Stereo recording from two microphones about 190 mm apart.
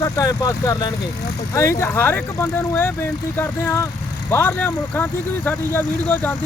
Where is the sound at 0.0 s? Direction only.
20° left (ahead or behind).